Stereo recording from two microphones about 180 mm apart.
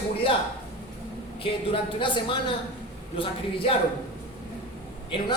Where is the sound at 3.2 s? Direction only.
30° left (ahead or behind).